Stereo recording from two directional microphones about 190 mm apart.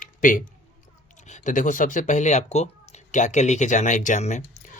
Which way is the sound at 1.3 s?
40° left (ahead or behind).